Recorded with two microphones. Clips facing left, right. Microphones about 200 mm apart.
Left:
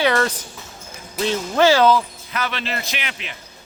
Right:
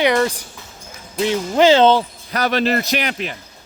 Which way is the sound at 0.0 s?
15° right (ahead or behind).